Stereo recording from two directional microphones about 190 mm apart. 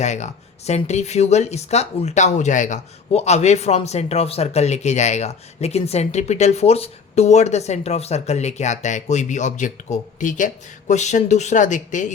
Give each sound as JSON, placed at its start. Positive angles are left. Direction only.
{"t": 0.0, "sound": "speech", "side_deg": 40}